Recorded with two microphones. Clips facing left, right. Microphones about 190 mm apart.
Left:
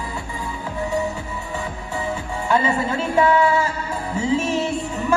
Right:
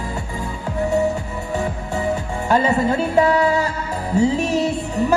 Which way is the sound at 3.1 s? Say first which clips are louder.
Left 1 dB; 40° right (ahead or behind).